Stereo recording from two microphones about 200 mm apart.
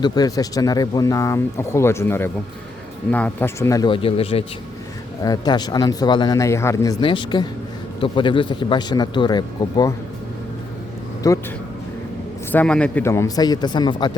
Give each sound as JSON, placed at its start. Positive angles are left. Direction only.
{"t": 0.0, "sound": "speech", "side_deg": 20}
{"t": 11.2, "sound": "speech", "side_deg": 15}
{"t": 12.5, "sound": "speech", "side_deg": 5}